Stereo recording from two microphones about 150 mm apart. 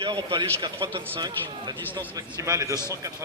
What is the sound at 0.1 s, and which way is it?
A man's voice, 30° right (ahead or behind).